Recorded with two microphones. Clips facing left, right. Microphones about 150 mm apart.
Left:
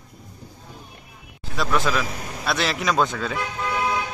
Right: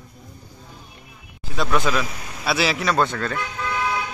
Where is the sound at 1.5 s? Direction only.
Centre (ahead or behind).